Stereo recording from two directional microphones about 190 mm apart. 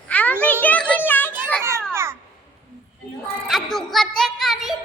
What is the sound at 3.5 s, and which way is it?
A woman's voice, centre (ahead or behind).